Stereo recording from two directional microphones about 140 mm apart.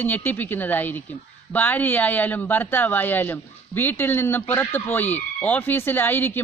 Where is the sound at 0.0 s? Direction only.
15° left (ahead or behind).